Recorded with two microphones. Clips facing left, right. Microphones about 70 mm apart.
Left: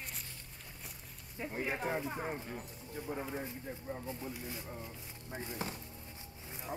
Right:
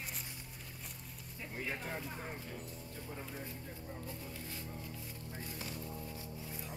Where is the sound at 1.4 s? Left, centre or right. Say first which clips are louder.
Left 5 dB; left.